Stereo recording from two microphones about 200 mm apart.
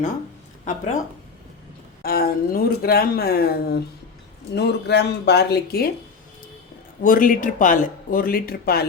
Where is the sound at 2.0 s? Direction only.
50° left (ahead or behind).